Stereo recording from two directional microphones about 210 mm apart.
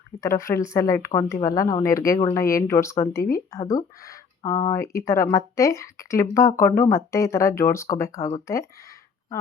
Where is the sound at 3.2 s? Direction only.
45° left (ahead or behind).